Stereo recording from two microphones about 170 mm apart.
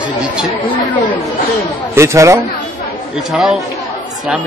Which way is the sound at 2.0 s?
15° right (ahead or behind).